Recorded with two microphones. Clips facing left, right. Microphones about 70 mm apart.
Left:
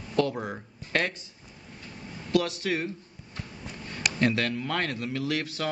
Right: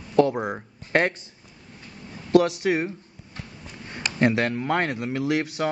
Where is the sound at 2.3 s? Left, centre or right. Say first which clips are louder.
Right 8 dB; right.